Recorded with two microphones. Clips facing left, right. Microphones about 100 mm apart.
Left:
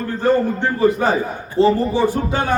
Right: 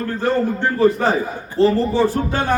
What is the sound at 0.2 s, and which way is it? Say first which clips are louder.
A man's voice: left 3 dB; 15° left (ahead or behind).